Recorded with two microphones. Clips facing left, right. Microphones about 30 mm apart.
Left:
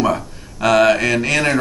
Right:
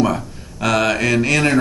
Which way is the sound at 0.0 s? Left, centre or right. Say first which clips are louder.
Even; centre.